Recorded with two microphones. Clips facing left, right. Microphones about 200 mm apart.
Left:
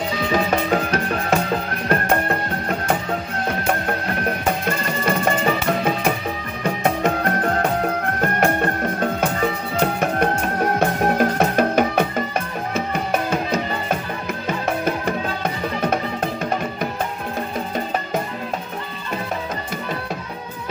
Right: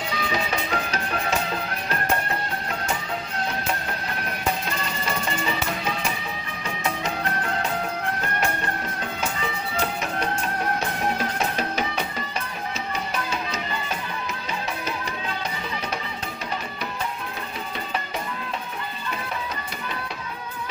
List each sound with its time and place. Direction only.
0.3 s music: 50° left (ahead or behind)
4.6 s music: 55° left (ahead or behind)
17.7 s music: 45° left (ahead or behind)